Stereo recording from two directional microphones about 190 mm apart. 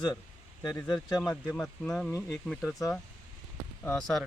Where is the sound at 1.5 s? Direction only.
5° left (ahead or behind).